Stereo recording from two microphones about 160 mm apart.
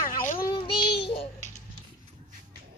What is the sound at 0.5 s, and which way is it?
Child singing, 35° left (ahead or behind).